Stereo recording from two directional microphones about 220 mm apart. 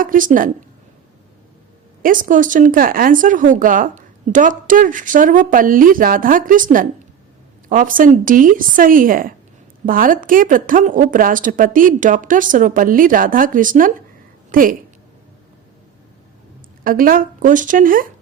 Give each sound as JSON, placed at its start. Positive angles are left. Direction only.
{"t": 0.0, "sound": "speech", "side_deg": -40}
{"t": 2.0, "sound": "speech", "side_deg": -40}
{"t": 16.8, "sound": "speech", "side_deg": -40}